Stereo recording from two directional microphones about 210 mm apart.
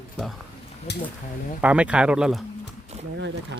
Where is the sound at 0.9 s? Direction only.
50° left (ahead or behind).